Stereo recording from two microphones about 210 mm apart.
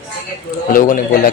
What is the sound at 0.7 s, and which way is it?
Speech, 40° left (ahead or behind).